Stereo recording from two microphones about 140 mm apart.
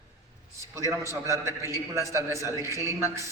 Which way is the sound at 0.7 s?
20° right (ahead or behind).